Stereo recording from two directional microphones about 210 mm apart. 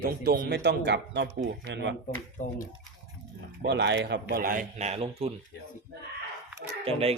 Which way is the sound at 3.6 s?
55° right (ahead or behind).